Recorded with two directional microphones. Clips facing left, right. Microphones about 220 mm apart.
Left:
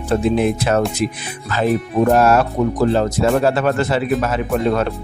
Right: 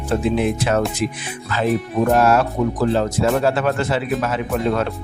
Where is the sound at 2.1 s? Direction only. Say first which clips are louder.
Left 1 dB; 45° left (ahead or behind).